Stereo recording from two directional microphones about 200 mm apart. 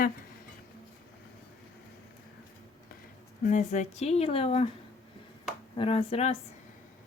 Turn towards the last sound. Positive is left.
turn(degrees=30)  # may be behind; listen again after turning